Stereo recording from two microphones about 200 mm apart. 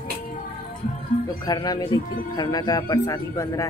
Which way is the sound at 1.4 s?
20° left (ahead or behind).